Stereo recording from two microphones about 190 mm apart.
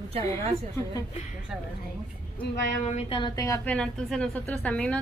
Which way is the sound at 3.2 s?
15° left (ahead or behind).